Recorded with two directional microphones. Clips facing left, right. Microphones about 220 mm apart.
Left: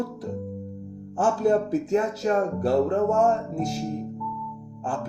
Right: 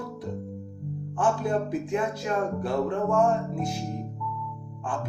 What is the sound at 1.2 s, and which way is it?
Speech, 40° left (ahead or behind).